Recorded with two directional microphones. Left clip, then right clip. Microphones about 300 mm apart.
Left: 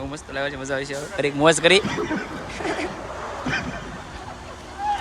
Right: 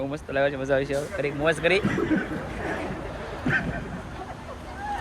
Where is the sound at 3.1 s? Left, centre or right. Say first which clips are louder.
Left 4 dB; left.